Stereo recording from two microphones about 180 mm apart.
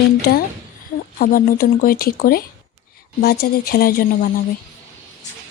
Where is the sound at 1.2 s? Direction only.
55° left (ahead or behind).